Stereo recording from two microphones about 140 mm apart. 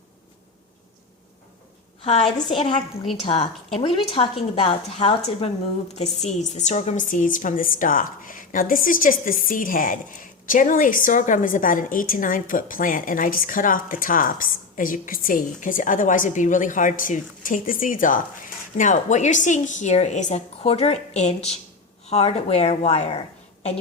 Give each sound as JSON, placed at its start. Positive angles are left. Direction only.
{"t": 2.0, "sound": "speech", "side_deg": 50}
{"t": 2.5, "sound": "a woman's voice", "side_deg": 35}